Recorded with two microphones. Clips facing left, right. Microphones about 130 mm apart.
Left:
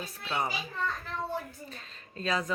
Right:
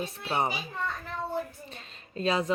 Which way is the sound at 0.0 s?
30° right (ahead or behind).